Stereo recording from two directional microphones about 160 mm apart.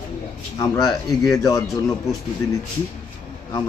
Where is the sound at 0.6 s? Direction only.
25° left (ahead or behind).